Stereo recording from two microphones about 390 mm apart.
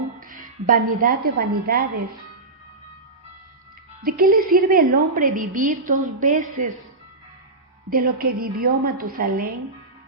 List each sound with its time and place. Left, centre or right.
0.2 s a woman's voice: right
4.0 s a woman's voice: right
7.9 s a woman's voice: right